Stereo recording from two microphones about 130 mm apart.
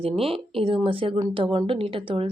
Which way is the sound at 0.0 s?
45° right (ahead or behind).